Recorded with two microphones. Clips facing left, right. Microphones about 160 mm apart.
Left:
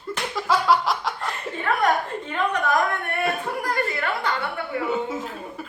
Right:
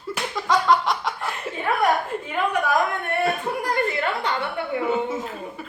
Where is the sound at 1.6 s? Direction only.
10° right (ahead or behind).